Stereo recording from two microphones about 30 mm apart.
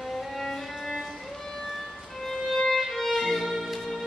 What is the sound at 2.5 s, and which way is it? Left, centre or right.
Violin, centre.